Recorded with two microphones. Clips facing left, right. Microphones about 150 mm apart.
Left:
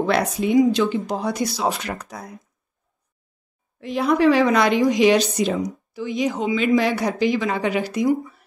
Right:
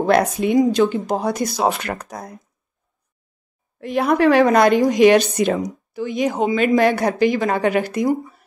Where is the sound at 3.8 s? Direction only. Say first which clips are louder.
Right 1 dB; 55° right (ahead or behind).